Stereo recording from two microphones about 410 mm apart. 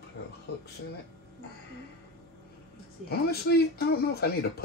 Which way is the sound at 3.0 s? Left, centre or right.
Left.